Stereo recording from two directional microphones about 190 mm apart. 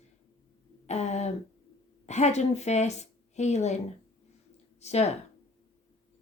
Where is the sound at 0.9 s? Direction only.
35° left (ahead or behind).